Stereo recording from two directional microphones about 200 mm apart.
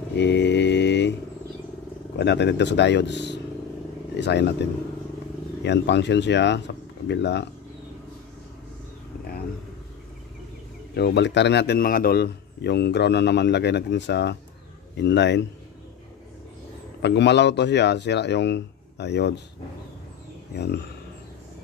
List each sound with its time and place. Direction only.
0.1 s mantra: 60° left (ahead or behind)
2.1 s a man's voice: 60° left (ahead or behind)
11.0 s a man's voice: 55° left (ahead or behind)
17.0 s a man's voice: 60° left (ahead or behind)
20.5 s a man's voice: 55° left (ahead or behind)